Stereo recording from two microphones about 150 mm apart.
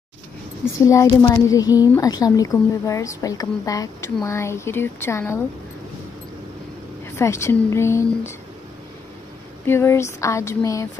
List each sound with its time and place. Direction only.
0.8 s a woman's voice: 25° left (ahead or behind)
7.2 s a woman's voice: 20° left (ahead or behind)
9.7 s a woman's voice: 15° left (ahead or behind)